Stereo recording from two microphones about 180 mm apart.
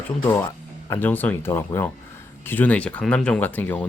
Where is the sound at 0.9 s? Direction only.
10° left (ahead or behind).